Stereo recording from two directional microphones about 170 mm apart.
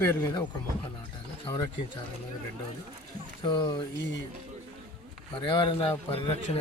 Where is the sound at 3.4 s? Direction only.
30° left (ahead or behind).